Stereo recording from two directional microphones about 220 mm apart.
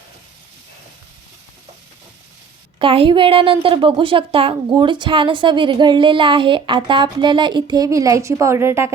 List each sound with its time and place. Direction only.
2.7 s a woman's voice: 25° right (ahead or behind)